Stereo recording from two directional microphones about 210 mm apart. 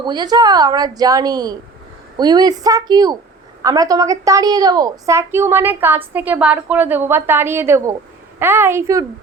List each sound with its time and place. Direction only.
0.0 s a woman's voice: 20° right (ahead or behind)